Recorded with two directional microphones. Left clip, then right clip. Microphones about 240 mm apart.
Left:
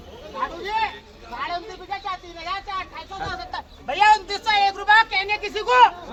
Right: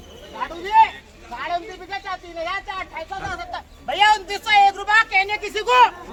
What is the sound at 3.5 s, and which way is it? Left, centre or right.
A man's voice, centre.